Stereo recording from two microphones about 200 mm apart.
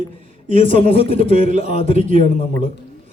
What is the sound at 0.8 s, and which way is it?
A man's voice, 30° left (ahead or behind).